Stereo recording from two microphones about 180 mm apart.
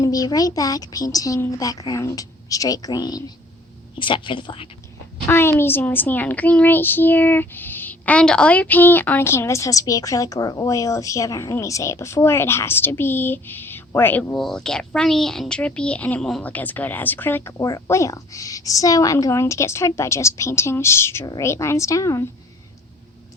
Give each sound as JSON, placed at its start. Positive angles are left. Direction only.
{"t": 0.0, "sound": "a child's voice", "side_deg": 20}
{"t": 5.3, "sound": "a woman's voice", "side_deg": 15}